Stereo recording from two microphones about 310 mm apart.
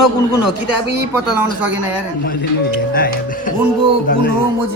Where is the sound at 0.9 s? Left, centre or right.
Centre.